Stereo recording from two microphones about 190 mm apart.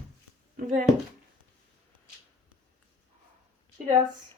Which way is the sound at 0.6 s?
45° right (ahead or behind).